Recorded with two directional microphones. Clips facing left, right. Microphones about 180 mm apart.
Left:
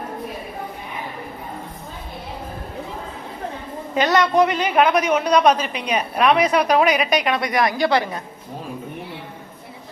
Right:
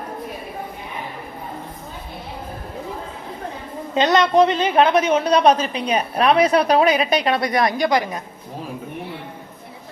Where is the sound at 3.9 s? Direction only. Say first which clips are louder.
Right 2 dB; 20° right (ahead or behind).